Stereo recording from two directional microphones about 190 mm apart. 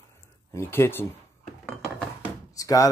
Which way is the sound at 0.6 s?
10° left (ahead or behind).